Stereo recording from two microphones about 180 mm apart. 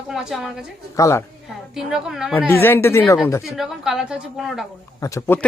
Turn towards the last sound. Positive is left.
turn(degrees=20)  # may be behind; listen again after turning